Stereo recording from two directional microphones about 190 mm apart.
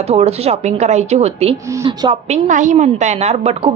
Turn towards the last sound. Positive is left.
turn(degrees=-35)  # may be behind; listen again after turning